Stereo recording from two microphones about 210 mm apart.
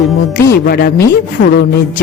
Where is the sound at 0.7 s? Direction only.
45° left (ahead or behind).